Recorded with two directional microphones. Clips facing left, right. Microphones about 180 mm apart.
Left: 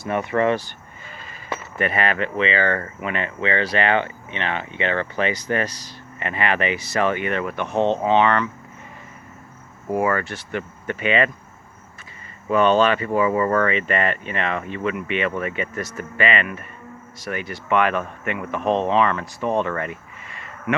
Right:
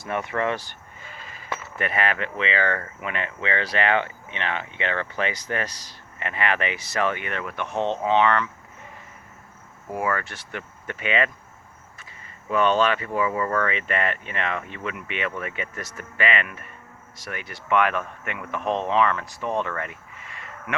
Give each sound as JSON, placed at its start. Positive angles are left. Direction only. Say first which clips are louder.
{"t": 0.0, "sound": "speech", "louder": "left 5 dB", "side_deg": 0}
{"t": 7.6, "sound": "speech", "louder": "left 5 dB", "side_deg": 35}
{"t": 8.0, "sound": "speech", "louder": "right 1 dB", "side_deg": 0}
{"t": 10.0, "sound": "speech", "louder": "left 4 dB", "side_deg": 5}
{"t": 12.5, "sound": "speech", "louder": "left 4 dB", "side_deg": 0}
{"t": 18.6, "sound": "speech", "louder": "left 5 dB", "side_deg": 30}
{"t": 18.9, "sound": "speech", "louder": "left 2 dB", "side_deg": 0}
{"t": 19.4, "sound": "speech", "louder": "left 5 dB", "side_deg": 30}
{"t": 19.6, "sound": "a sound", "louder": "left 5 dB", "side_deg": 0}